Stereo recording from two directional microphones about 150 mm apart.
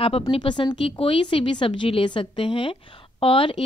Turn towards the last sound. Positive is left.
turn(degrees=35)  # may be behind; listen again after turning